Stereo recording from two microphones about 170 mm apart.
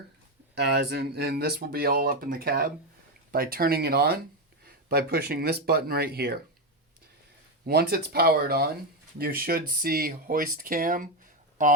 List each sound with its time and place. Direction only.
0.5 s speech: 80° right
7.7 s speech: 65° right (ahead or behind); by 11.7 s 50° right (ahead or behind)